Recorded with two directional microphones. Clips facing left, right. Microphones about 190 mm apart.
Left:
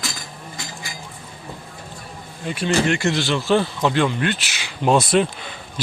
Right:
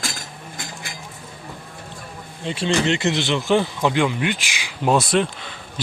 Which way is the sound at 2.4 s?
25° right (ahead or behind).